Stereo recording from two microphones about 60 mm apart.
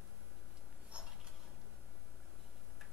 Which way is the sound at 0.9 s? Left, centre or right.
Centre.